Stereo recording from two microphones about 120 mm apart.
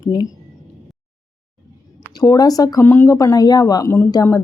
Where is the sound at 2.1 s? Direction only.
35° left (ahead or behind).